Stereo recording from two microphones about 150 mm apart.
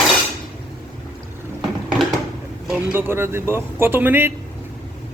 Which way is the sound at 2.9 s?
15° right (ahead or behind).